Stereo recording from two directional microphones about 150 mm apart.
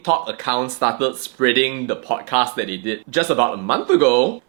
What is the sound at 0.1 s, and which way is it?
Speech, 15° right (ahead or behind).